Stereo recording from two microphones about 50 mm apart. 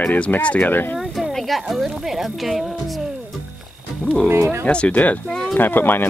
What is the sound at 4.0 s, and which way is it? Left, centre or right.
Speech, centre.